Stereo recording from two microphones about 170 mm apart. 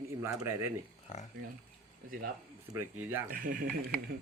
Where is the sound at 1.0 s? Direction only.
45° left (ahead or behind).